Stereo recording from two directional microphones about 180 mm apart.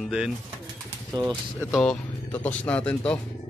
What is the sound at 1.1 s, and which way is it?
Speech, 20° right (ahead or behind).